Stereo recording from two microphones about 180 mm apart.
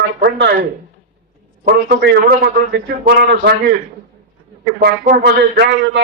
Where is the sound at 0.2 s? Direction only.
60° right (ahead or behind).